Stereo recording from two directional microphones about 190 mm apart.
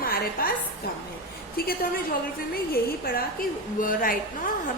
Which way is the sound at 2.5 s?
50° left (ahead or behind).